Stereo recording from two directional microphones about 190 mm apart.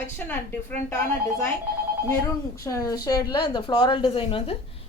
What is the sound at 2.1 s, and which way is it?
A woman's voice, 15° left (ahead or behind).